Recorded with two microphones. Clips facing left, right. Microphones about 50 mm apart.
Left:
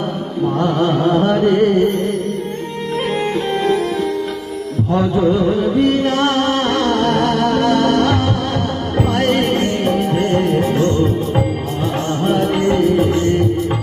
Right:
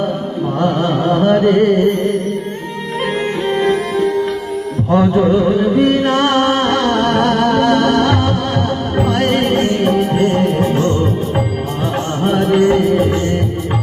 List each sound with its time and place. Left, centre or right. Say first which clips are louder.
1.3 s music: right 2 dB; centre
3.5 s music: right 3 dB; right
4.9 s music: right 4 dB; right
5.7 s music: right 2 dB; centre
12.2 s music: right 4 dB; centre